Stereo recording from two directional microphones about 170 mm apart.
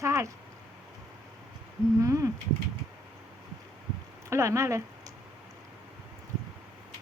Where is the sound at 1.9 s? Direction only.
20° right (ahead or behind).